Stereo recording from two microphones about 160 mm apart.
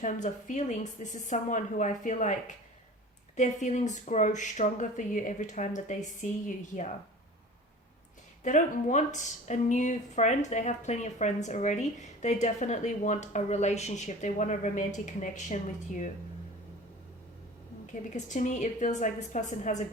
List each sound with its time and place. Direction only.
0.0 s speech: 50° left (ahead or behind)
3.3 s speech: 50° left (ahead or behind)
8.4 s speech: 50° left (ahead or behind)
18.1 s speech: 50° left (ahead or behind)